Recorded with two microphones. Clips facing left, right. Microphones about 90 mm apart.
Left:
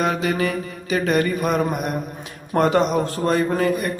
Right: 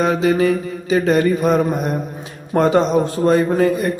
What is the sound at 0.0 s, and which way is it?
A man's voice, 25° right (ahead or behind).